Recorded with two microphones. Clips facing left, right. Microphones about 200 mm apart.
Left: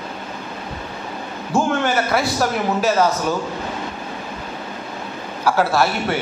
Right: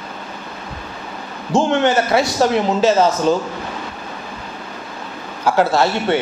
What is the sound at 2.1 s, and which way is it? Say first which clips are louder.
A man's voice: right 4 dB; 25° right (ahead or behind).